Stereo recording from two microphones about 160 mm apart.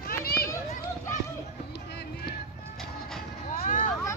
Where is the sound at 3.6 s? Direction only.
55° left (ahead or behind).